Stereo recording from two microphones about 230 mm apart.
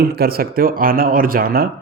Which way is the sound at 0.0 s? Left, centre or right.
Right.